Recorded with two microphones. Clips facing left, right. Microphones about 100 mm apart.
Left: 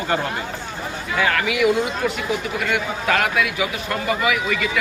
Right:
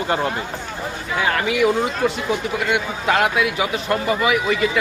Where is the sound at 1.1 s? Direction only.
25° right (ahead or behind).